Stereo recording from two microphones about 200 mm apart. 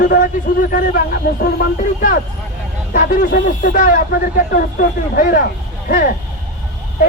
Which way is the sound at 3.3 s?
55° left (ahead or behind).